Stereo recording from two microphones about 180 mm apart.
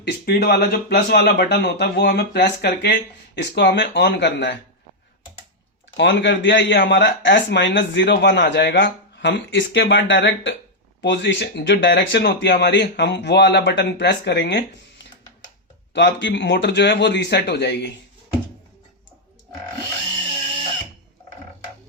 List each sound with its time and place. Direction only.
0.0 s speech: 65° left (ahead or behind); by 4.5 s 80° left
6.0 s a man's voice: 80° left